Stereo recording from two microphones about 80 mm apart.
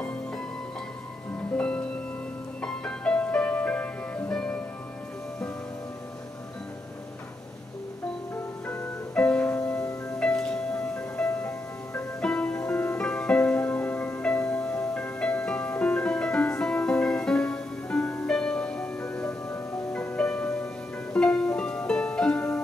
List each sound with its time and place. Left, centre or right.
2.6 s music: centre
8.6 s music: left
9.1 s music: centre
11.2 s music: left
12.2 s music: centre